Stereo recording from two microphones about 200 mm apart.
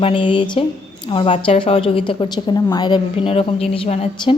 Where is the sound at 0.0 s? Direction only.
25° left (ahead or behind).